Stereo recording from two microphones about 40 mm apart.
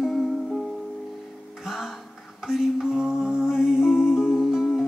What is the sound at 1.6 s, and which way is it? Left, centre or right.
Music, centre.